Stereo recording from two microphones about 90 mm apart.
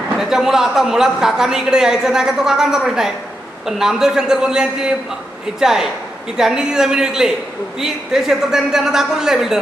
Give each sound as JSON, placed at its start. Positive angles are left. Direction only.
{"t": 0.2, "sound": "a woman's voice", "side_deg": -5}